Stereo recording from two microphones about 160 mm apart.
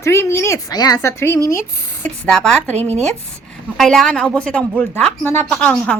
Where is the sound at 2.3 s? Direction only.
5° left (ahead or behind).